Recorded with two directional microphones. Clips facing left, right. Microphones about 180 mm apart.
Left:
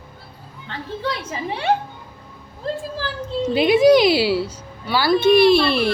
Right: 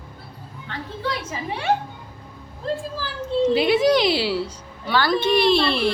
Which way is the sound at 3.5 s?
15° left (ahead or behind).